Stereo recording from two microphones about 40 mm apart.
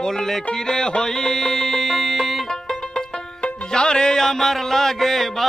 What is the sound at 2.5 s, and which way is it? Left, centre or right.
Music, centre.